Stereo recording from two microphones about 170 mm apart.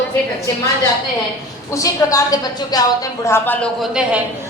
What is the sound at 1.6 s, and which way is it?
A woman's voice, 20° left (ahead or behind).